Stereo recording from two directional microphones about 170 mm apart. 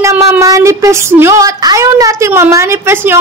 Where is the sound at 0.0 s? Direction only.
15° right (ahead or behind).